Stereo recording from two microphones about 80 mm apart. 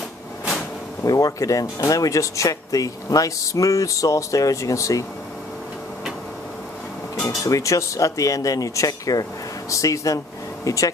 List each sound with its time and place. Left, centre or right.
1.0 s speech: left
7.2 s speech: left